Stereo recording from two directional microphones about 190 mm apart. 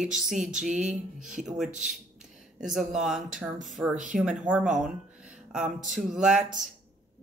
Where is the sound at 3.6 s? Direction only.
Centre (ahead or behind).